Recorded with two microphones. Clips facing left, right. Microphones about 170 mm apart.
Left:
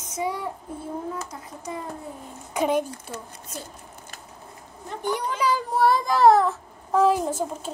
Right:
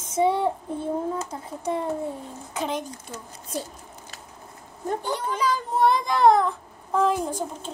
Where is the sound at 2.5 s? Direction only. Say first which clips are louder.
Left 6 dB; 10° left (ahead or behind).